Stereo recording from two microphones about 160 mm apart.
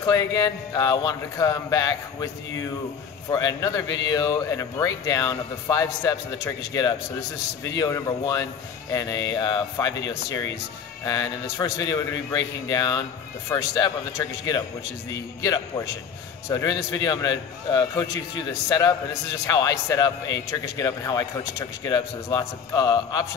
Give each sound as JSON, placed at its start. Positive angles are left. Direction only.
{"t": 0.0, "sound": "speech", "side_deg": 20}